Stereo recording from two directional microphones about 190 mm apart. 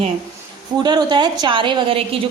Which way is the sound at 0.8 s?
20° right (ahead or behind).